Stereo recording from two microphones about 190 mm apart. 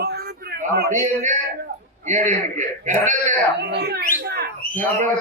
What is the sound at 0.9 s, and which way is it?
A man's voice, 40° right (ahead or behind).